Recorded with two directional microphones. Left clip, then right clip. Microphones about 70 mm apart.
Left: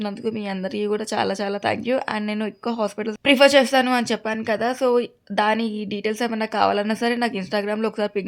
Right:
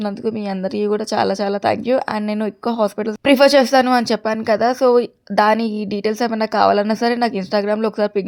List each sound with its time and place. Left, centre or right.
0.0 s a woman's voice: right